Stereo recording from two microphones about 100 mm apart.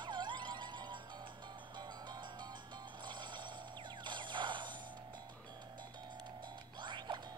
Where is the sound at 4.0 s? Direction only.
50° right (ahead or behind).